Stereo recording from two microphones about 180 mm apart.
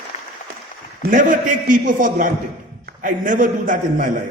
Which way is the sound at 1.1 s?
50° right (ahead or behind).